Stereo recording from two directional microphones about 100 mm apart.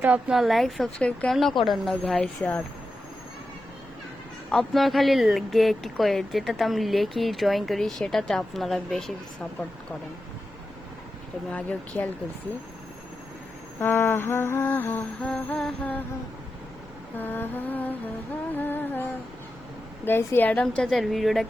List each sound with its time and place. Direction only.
0.0 s a woman's voice: 15° right (ahead or behind)
0.3 s speech: centre (ahead or behind)
4.5 s speech: centre (ahead or behind)
11.5 s a woman's voice: 15° left (ahead or behind)
13.7 s mantra: 20° left (ahead or behind)
15.3 s a woman's voice: 15° left (ahead or behind)
17.2 s mantra: 20° left (ahead or behind)
20.1 s a woman's voice: 20° left (ahead or behind); by 21.4 s centre (ahead or behind)